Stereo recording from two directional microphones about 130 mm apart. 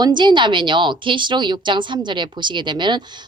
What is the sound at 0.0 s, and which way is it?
A woman's voice, 35° right (ahead or behind).